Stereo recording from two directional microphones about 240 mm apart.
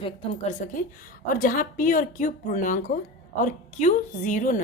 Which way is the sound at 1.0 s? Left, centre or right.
Left.